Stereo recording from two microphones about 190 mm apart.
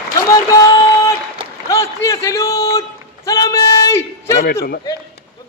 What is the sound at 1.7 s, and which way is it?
A man's voice, 15° left (ahead or behind).